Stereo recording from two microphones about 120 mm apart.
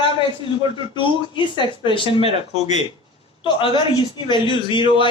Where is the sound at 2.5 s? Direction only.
70° left (ahead or behind).